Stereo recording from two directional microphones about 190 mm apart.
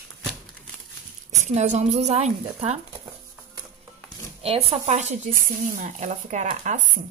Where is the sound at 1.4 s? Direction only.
35° right (ahead or behind).